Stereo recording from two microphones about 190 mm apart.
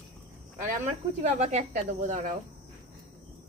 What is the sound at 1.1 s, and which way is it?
Speech, 35° right (ahead or behind).